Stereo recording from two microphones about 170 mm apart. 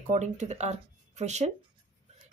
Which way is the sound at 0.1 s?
45° right (ahead or behind).